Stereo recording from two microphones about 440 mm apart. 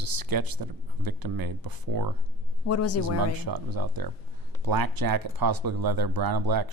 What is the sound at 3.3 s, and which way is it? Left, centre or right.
Speech, right.